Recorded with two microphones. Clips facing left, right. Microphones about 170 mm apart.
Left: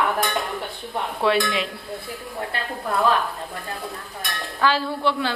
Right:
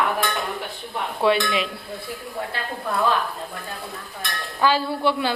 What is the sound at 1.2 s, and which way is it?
Speech, centre (ahead or behind).